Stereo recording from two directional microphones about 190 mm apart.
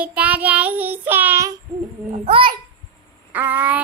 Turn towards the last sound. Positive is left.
turn(degrees=-10)  # may be behind; listen again after turning